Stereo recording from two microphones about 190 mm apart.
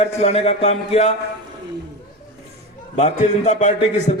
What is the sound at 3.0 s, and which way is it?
Speech, 35° left (ahead or behind).